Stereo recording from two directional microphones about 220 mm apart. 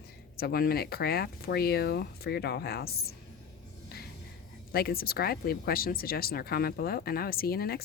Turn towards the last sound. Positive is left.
turn(degrees=45)  # may be behind; listen again after turning